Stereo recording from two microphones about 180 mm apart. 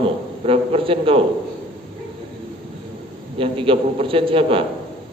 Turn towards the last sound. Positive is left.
turn(degrees=-30)  # may be behind; listen again after turning